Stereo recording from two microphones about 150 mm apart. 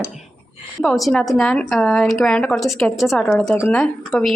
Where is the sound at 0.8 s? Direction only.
Centre (ahead or behind).